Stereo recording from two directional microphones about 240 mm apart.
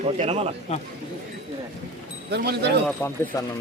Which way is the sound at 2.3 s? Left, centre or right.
Right.